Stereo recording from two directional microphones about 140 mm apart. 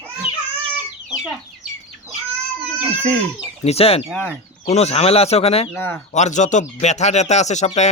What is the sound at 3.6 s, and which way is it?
Speech, 45° left (ahead or behind).